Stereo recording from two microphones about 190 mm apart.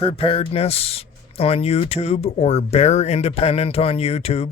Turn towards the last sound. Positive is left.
turn(degrees=30)  # may be behind; listen again after turning